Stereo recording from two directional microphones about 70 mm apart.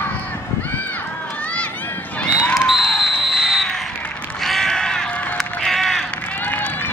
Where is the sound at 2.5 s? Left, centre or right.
Centre.